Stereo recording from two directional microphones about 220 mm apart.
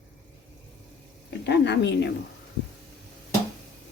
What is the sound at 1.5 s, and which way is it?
Speech, 50° left (ahead or behind).